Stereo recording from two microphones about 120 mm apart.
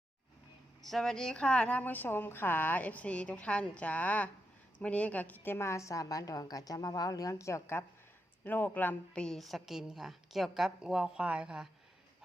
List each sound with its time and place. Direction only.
0.9 s a woman's voice: centre (ahead or behind)